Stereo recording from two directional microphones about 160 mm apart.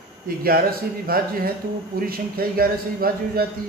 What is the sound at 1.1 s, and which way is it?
Speech, 70° right (ahead or behind).